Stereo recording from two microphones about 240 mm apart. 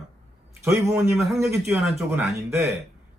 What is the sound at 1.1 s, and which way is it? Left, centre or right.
A man's voice, centre.